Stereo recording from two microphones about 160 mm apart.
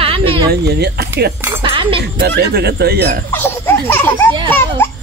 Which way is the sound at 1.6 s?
35° right (ahead or behind).